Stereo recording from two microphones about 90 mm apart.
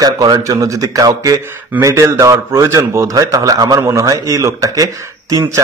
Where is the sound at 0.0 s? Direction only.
45° right (ahead or behind).